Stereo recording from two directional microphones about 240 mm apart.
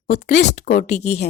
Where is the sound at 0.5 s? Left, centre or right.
Left.